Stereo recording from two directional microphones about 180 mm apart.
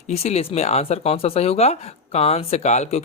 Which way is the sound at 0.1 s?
35° left (ahead or behind).